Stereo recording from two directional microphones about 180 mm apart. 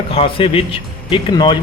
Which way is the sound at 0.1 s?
30° left (ahead or behind).